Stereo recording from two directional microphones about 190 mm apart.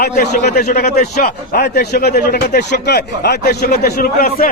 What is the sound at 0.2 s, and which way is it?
A man's voice, 55° left (ahead or behind).